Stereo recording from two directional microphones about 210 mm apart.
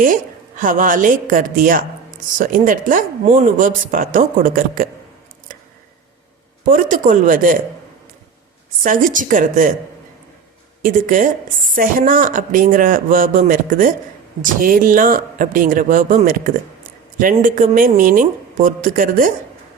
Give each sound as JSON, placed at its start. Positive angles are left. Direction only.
{"t": 0.0, "sound": "a woman's voice", "side_deg": -40}
{"t": 6.7, "sound": "a woman's voice", "side_deg": -40}
{"t": 8.8, "sound": "a woman's voice", "side_deg": -40}
{"t": 10.8, "sound": "a woman's voice", "side_deg": -40}